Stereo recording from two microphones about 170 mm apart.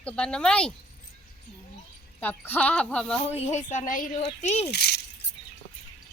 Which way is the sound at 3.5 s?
45° left (ahead or behind).